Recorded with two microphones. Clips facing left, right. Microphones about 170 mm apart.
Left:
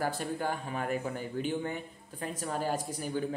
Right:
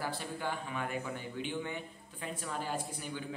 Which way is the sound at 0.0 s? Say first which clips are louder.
Left 5 dB; 45° left (ahead or behind).